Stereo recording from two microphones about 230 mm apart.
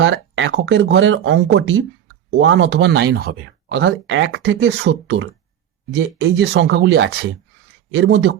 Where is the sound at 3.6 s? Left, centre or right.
Right.